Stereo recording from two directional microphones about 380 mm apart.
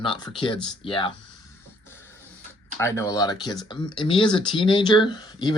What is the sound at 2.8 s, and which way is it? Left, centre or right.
Speech, centre.